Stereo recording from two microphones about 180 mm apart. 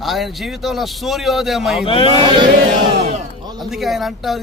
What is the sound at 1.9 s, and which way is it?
Speech, 30° left (ahead or behind).